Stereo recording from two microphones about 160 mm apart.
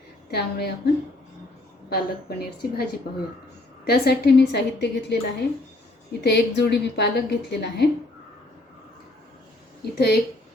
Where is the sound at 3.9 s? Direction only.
80° left.